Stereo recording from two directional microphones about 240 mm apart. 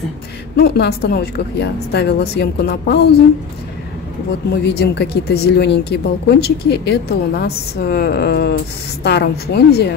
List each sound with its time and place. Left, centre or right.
0.6 s a woman's voice: left
4.6 s speech: left